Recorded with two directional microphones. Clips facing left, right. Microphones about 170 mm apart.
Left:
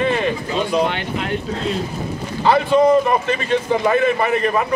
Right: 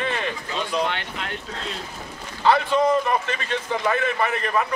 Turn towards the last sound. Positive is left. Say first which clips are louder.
# left 6 dB
turn(degrees=20)  # may be behind; listen again after turning